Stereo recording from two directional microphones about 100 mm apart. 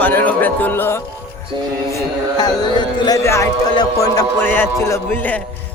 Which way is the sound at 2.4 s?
45° left (ahead or behind).